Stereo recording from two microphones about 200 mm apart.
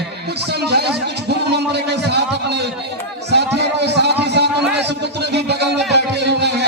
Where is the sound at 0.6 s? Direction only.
55° right (ahead or behind).